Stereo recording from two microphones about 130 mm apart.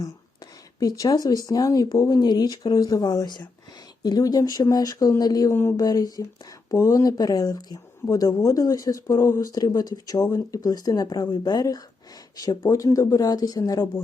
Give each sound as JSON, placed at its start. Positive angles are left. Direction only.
{"t": 0.8, "sound": "speech", "side_deg": 30}